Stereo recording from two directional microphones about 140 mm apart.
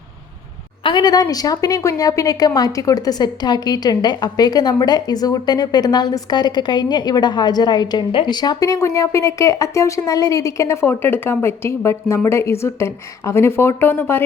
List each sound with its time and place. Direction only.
0.9 s a woman's voice: 30° left (ahead or behind); by 14.3 s 15° left (ahead or behind)